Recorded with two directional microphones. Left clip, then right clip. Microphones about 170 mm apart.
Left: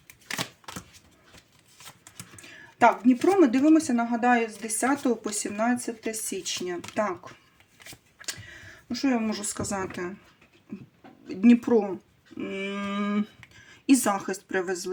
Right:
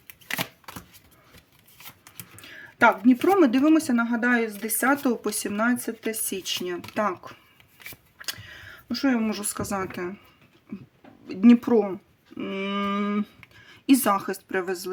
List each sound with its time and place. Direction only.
3.1 s speech: 40° right (ahead or behind)
8.2 s a sound: 30° right (ahead or behind)
9.0 s a woman's voice: 30° right (ahead or behind)
11.3 s a woman's voice: 30° right (ahead or behind)
12.4 s a sound: 30° right (ahead or behind)
13.7 s speech: 25° right (ahead or behind)